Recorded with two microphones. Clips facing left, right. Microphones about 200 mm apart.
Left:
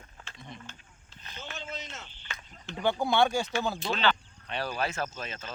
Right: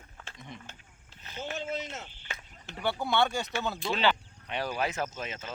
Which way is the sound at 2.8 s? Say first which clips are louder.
Left 3 dB; 15° left (ahead or behind).